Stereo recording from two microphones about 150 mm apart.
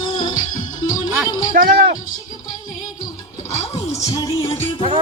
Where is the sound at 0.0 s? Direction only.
30° left (ahead or behind).